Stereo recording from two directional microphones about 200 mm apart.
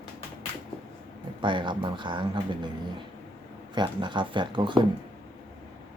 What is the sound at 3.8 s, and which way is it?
Speech, 25° right (ahead or behind).